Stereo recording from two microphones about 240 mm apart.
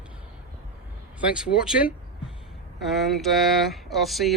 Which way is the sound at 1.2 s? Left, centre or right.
Centre.